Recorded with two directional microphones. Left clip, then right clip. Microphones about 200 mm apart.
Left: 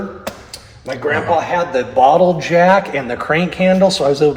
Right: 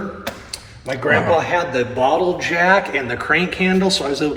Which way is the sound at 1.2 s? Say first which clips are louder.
Left 1 dB; 55° left (ahead or behind).